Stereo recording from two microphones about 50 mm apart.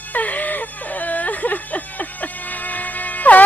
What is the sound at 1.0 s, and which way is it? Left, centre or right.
Music, left.